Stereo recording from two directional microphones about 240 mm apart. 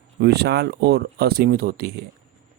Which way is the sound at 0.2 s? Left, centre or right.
Right.